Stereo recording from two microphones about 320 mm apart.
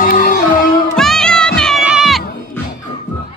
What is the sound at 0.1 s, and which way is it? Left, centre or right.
Music, left.